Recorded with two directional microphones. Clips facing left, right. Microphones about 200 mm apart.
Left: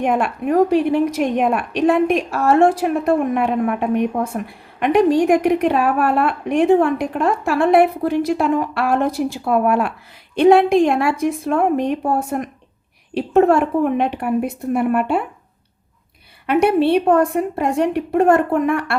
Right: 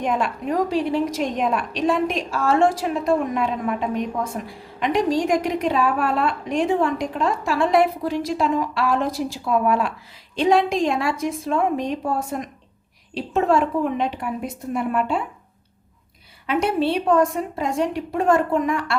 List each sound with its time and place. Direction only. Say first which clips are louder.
0.0 s a woman's voice: left 4 dB; 60° left (ahead or behind)
16.5 s a woman's voice: left 6 dB; 60° left (ahead or behind)